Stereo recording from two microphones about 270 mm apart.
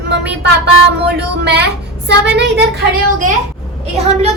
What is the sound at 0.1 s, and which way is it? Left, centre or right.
Speech, right.